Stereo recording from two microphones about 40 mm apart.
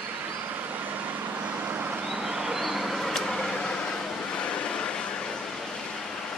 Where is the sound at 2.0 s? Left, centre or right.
Centre.